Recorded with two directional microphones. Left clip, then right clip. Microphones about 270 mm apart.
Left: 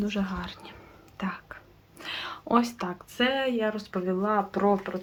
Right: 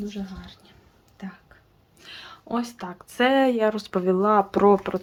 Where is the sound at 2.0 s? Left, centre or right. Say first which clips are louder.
Left 7 dB; centre.